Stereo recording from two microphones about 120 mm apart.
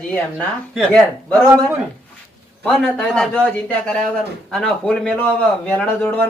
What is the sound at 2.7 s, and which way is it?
A man's voice, 5° left (ahead or behind).